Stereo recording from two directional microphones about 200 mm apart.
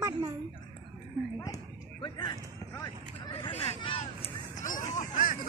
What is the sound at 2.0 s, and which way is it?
Speech, 20° left (ahead or behind).